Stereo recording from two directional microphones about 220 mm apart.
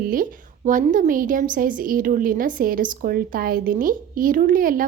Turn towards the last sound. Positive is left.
turn(degrees=-40)  # may be behind; listen again after turning